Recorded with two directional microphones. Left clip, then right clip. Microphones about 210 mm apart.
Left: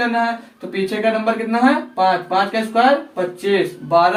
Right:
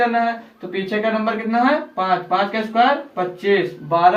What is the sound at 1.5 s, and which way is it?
Speech, 10° left (ahead or behind).